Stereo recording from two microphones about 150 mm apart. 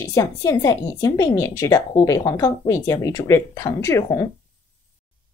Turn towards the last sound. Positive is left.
turn(degrees=20)  # may be behind; listen again after turning